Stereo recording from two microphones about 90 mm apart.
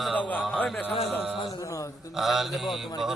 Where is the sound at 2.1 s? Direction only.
5° right (ahead or behind).